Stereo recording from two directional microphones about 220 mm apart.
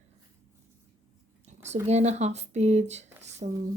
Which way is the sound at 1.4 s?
30° right (ahead or behind).